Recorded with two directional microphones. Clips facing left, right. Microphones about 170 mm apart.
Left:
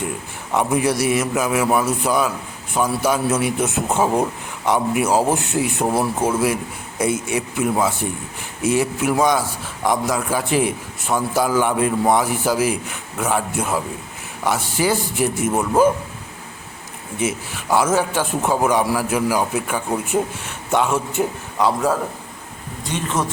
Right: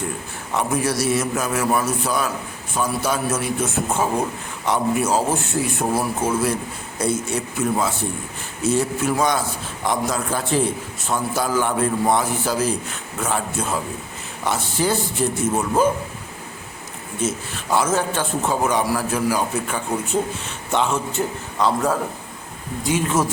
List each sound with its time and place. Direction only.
0.5 s a man's voice: 15° left (ahead or behind)
5.0 s a man's voice: 15° left (ahead or behind)
17.2 s a man's voice: 10° left (ahead or behind)
22.9 s speech: 5° right (ahead or behind)